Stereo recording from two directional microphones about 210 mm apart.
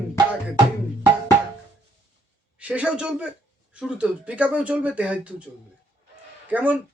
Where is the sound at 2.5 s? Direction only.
5° right (ahead or behind).